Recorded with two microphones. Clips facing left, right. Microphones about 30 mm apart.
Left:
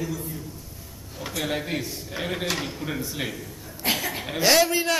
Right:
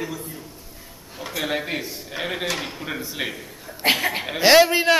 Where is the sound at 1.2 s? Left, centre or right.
Centre.